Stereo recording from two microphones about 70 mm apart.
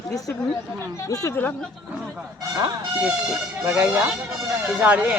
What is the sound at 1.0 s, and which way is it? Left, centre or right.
Speech, left.